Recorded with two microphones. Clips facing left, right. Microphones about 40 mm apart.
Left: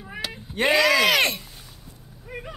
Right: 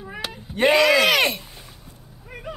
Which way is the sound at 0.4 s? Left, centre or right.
Centre.